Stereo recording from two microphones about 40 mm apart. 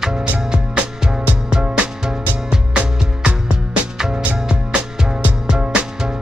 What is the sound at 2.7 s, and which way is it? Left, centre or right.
Music, right.